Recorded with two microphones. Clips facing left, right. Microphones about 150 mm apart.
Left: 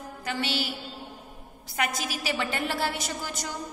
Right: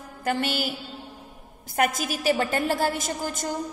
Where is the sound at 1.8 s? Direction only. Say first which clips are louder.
Right 6 dB; 45° right (ahead or behind).